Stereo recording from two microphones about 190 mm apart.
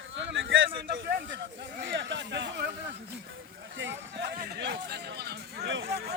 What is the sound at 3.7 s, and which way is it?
Speech, 75° right (ahead or behind).